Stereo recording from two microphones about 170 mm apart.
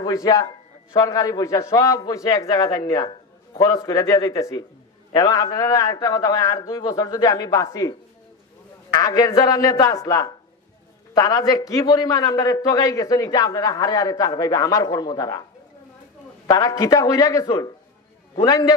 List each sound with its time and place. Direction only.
0.0 s a man's voice: 20° left (ahead or behind)
8.9 s a man's voice: 20° left (ahead or behind)
16.4 s a man's voice: 20° left (ahead or behind)